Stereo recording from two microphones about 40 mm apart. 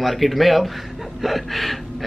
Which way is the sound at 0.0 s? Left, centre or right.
Centre.